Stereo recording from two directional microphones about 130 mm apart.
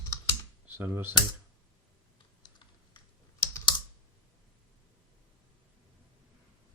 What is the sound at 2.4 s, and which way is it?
Typing, 35° left (ahead or behind).